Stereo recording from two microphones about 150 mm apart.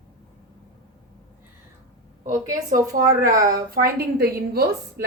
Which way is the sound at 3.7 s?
85° right.